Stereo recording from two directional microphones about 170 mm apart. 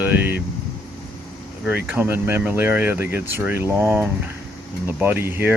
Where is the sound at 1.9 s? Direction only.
15° right (ahead or behind).